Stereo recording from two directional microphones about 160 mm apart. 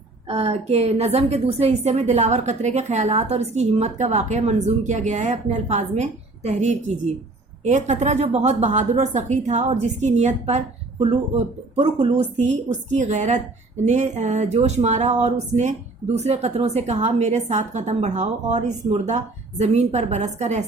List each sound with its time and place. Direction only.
0.3 s a woman's voice: 40° right (ahead or behind)